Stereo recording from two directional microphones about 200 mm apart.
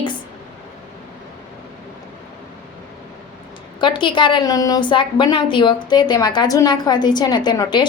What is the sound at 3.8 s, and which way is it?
A woman's voice, 25° left (ahead or behind).